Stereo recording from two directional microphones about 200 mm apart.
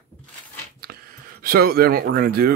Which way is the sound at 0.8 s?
50° right (ahead or behind).